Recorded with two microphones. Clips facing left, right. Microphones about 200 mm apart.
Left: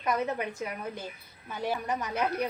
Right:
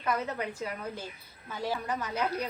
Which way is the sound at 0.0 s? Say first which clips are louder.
Left 2 dB; 20° left (ahead or behind).